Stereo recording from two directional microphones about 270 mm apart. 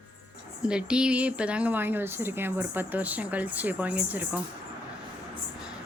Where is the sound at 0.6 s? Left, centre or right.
Centre.